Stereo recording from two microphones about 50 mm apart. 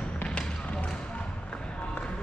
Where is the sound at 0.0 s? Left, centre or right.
Left.